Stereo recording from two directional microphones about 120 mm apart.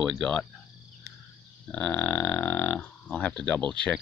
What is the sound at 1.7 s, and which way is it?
Speech, 10° left (ahead or behind).